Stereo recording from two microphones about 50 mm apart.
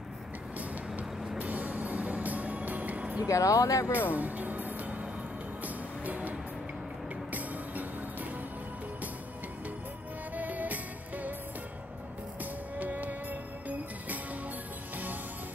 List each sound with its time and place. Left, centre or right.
1.4 s music: right
3.3 s speech: left
4.1 s music: right
6.0 s music: right
7.3 s music: right
10.3 s music: right
12.7 s music: right